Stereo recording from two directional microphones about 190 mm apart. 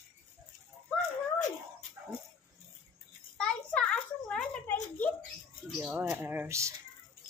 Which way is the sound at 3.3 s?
5° left (ahead or behind).